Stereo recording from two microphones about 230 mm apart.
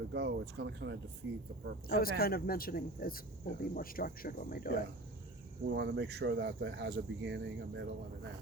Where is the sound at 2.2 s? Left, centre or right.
Left.